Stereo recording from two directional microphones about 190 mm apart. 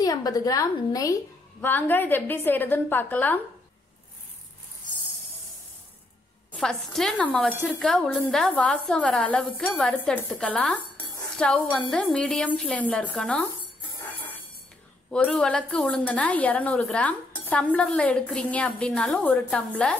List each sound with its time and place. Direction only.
0.0 s a woman's voice: 20° left (ahead or behind)
6.5 s a woman's voice: centre (ahead or behind)
15.0 s a woman's voice: 5° left (ahead or behind)